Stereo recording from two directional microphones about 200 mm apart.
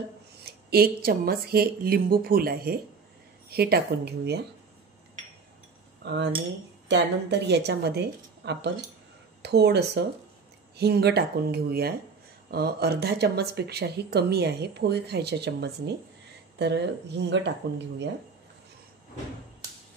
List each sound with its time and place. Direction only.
0.5 s speech: 50° right (ahead or behind)
6.0 s speech: 60° right (ahead or behind)